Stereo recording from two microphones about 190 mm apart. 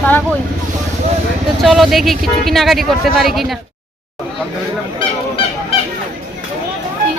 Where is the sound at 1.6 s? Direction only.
Centre (ahead or behind).